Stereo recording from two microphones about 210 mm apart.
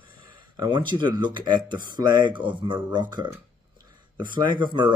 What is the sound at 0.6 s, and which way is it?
Speech, 20° right (ahead or behind).